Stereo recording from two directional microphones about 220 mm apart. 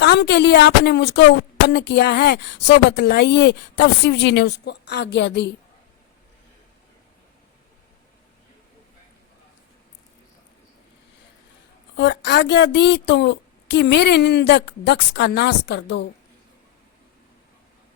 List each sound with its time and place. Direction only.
0.0 s speech: 50° left (ahead or behind)
11.9 s speech: 50° left (ahead or behind)